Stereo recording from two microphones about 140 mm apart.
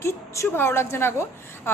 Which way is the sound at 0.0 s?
20° left (ahead or behind).